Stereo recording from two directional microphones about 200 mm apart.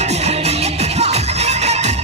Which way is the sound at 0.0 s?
35° right (ahead or behind).